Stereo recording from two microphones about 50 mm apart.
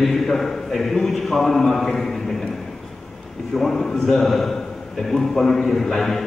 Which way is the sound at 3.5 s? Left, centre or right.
Centre.